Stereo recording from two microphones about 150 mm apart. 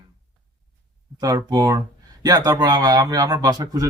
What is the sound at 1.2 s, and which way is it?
A man's voice, 25° right (ahead or behind).